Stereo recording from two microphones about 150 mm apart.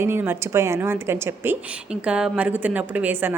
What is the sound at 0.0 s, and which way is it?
A woman's voice, 15° right (ahead or behind).